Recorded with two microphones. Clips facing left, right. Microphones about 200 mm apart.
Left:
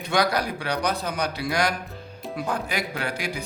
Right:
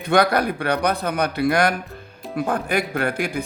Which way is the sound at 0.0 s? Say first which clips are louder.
Right 5 dB; 55° right (ahead or behind).